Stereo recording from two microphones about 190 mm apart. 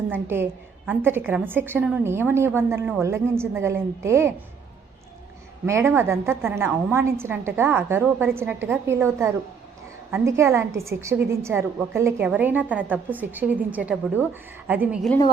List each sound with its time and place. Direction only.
0.1 s a woman's voice: 10° right (ahead or behind)
5.6 s a woman's voice: 15° right (ahead or behind)